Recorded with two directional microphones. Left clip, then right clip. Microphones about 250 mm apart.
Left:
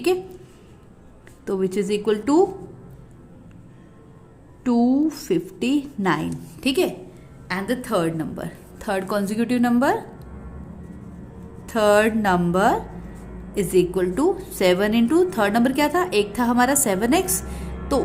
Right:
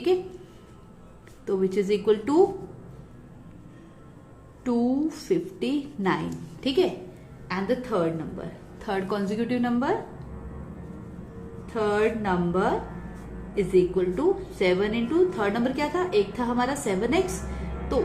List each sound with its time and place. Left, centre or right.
1.5 s a woman's voice: left
4.6 s a woman's voice: left
11.6 s a woman's voice: left